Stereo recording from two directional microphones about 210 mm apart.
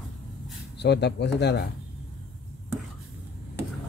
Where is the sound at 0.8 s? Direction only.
55° left (ahead or behind).